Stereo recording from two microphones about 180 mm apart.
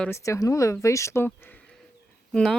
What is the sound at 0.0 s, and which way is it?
Speech, 15° left (ahead or behind).